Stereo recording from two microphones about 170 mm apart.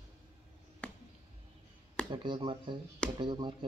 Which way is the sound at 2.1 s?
30° right (ahead or behind).